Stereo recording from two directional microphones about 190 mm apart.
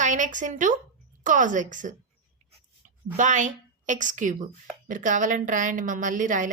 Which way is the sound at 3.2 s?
40° right (ahead or behind).